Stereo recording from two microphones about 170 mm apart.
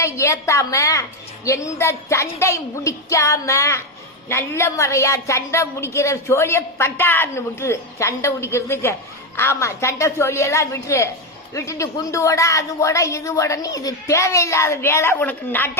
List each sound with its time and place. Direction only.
0.0 s a woman's voice: 15° left (ahead or behind)